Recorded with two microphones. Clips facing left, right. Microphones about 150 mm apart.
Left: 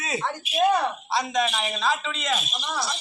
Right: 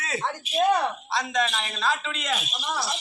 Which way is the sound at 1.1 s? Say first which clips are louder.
Left 3 dB; 5° left (ahead or behind).